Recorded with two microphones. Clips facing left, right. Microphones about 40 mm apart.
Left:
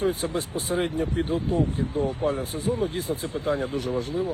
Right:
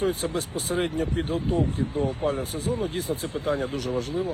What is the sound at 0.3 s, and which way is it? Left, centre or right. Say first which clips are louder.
Speech: left 1 dB; left.